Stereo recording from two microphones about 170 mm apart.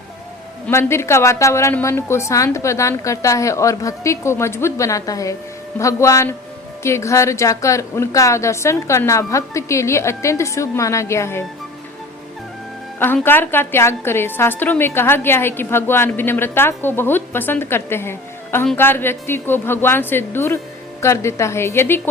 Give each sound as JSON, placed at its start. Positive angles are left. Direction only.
{"t": 0.7, "sound": "a woman's voice", "side_deg": 15}
{"t": 13.2, "sound": "a woman's voice", "side_deg": 10}